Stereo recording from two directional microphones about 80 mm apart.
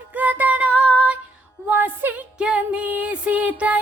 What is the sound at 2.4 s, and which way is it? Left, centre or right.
Music, centre.